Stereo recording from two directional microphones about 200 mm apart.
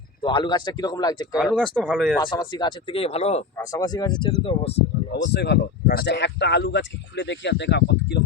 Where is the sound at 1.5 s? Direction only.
5° right (ahead or behind).